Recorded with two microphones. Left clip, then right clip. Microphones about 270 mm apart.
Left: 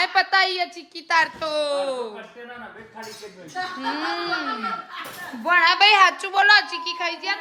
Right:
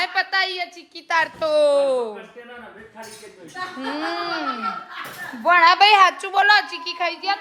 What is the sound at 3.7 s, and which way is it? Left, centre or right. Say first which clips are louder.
A woman's voice: right 1 dB; centre.